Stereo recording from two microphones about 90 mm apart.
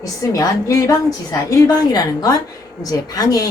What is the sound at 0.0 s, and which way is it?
A woman's voice, 40° left (ahead or behind).